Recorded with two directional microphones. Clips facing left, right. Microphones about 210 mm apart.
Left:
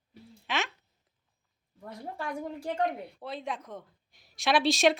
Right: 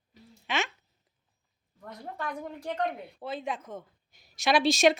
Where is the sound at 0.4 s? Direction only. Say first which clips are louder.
Right 1 dB; centre (ahead or behind).